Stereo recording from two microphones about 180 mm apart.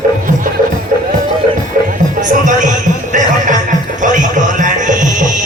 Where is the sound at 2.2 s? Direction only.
45° right (ahead or behind).